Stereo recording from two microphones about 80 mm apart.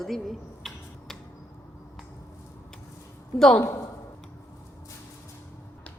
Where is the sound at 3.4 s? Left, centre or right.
Centre.